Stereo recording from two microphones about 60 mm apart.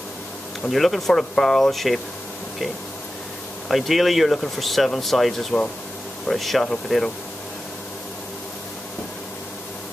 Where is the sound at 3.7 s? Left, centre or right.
Centre.